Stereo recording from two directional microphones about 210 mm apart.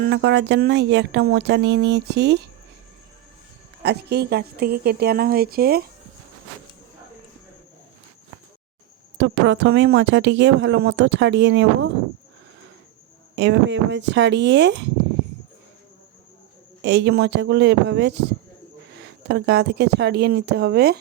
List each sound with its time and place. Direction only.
0.0 s speech: 55° right (ahead or behind)
3.8 s speech: 50° right (ahead or behind)
9.1 s speech: 55° right (ahead or behind)
13.3 s speech: 55° right (ahead or behind)
16.8 s speech: 55° right (ahead or behind)